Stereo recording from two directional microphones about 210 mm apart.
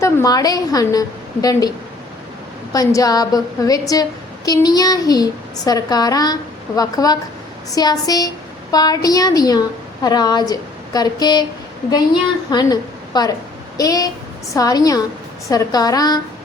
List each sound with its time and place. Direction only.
0.0 s a woman's voice: 15° left (ahead or behind)
2.7 s a woman's voice: 15° left (ahead or behind)
12.5 s a woman's voice: 20° left (ahead or behind)